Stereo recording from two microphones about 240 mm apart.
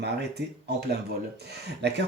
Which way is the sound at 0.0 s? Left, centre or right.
Right.